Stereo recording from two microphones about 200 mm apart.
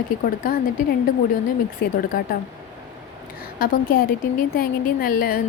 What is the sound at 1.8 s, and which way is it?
Speech, 50° left (ahead or behind).